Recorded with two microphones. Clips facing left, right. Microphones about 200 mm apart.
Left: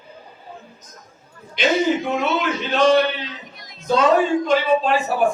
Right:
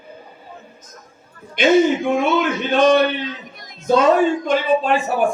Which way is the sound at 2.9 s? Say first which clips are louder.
Right 2 dB; 50° right (ahead or behind).